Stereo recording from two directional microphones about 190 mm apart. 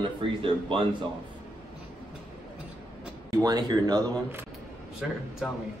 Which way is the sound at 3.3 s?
20° right (ahead or behind).